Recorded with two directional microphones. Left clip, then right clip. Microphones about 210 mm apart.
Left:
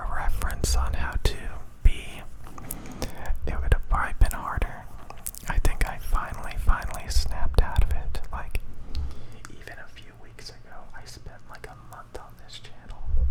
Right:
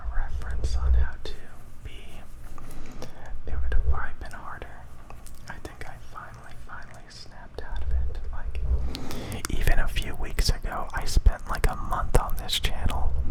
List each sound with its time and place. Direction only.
0.1 s whispering: 35° left (ahead or behind)
9.0 s whispering: 35° right (ahead or behind)